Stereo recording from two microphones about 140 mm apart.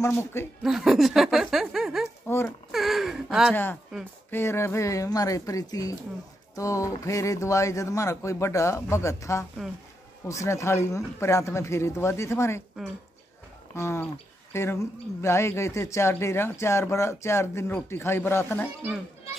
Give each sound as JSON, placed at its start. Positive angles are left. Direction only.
{"t": 0.0, "sound": "speech", "side_deg": 20}
{"t": 0.6, "sound": "speech", "side_deg": 0}
{"t": 4.3, "sound": "speech", "side_deg": 20}
{"t": 13.7, "sound": "speech", "side_deg": 20}